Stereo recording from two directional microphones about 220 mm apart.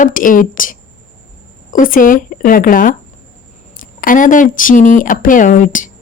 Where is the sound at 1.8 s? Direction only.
40° left (ahead or behind).